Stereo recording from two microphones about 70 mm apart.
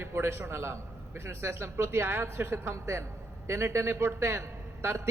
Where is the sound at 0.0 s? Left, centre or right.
Right.